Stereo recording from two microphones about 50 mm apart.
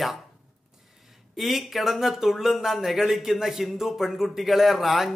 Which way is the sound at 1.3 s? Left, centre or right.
Centre.